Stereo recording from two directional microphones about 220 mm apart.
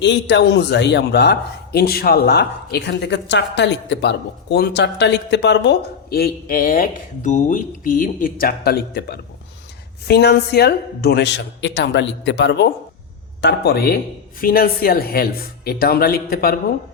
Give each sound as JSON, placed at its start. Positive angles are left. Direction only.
{"t": 0.0, "sound": "speech", "side_deg": 55}